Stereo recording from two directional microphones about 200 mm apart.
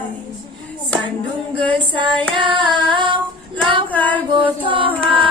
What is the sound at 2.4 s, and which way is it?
Female singing, 25° right (ahead or behind).